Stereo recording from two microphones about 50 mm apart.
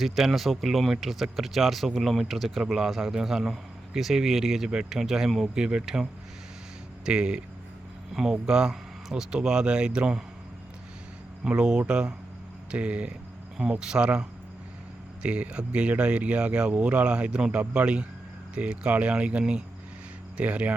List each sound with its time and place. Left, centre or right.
0.0 s speech: centre
11.4 s speech: centre